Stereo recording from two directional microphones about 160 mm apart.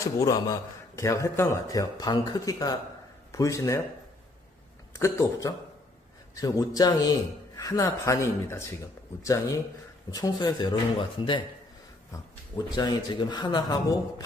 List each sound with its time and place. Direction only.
0.0 s a man's voice: 20° left (ahead or behind)
4.9 s a man's voice: 20° left (ahead or behind)
10.1 s a man's voice: 25° left (ahead or behind)
12.7 s a man's voice: 25° left (ahead or behind)